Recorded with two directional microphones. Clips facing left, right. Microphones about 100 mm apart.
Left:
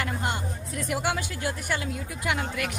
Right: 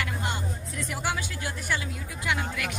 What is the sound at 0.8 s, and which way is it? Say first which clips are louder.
A woman's voice: left 3 dB; 50° left (ahead or behind).